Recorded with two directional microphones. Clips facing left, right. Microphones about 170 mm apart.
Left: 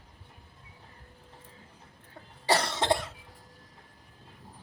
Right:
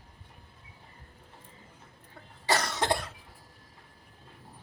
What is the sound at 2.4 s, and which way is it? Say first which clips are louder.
Cough: left 2 dB; 30° left (ahead or behind).